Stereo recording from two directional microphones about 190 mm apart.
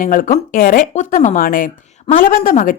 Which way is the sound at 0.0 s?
45° left (ahead or behind).